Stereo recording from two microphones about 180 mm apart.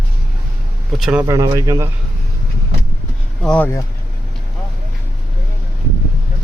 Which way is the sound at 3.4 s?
5° left (ahead or behind).